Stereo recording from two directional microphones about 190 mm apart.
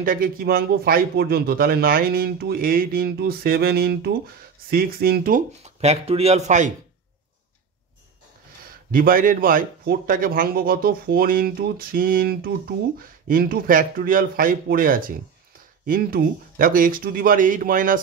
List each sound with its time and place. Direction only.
0.0 s speech: 50° right (ahead or behind)
8.9 s speech: 45° right (ahead or behind)